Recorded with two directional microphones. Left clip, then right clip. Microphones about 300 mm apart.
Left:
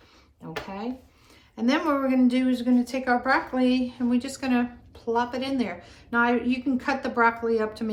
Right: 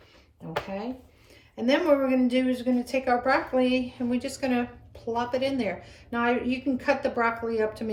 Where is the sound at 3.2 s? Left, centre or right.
Left.